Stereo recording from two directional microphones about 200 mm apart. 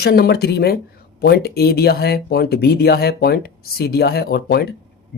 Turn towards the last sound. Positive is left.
turn(degrees=50)  # may be behind; listen again after turning